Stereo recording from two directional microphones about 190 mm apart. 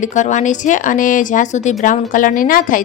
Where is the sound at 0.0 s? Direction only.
40° left (ahead or behind).